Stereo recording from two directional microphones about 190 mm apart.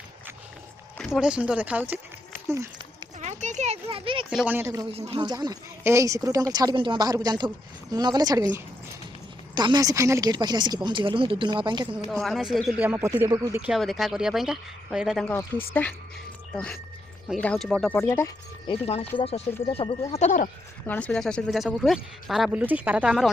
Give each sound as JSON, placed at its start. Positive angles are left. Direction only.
{"t": 0.9, "sound": "speech", "side_deg": 0}
{"t": 1.9, "sound": "a sound", "side_deg": -15}
{"t": 3.2, "sound": "speech", "side_deg": -40}
{"t": 4.3, "sound": "speech", "side_deg": -5}
{"t": 4.9, "sound": "speech", "side_deg": -30}
{"t": 12.0, "sound": "speech", "side_deg": 0}
{"t": 13.6, "sound": "speech", "side_deg": 0}
{"t": 15.3, "sound": "speech", "side_deg": 10}
{"t": 17.4, "sound": "speech", "side_deg": 5}
{"t": 18.7, "sound": "speech", "side_deg": 30}
{"t": 20.8, "sound": "speech", "side_deg": 10}